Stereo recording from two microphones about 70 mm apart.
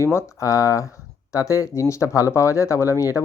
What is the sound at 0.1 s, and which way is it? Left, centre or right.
Speech, left.